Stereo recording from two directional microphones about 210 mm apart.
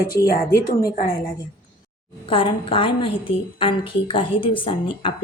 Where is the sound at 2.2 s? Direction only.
25° left (ahead or behind).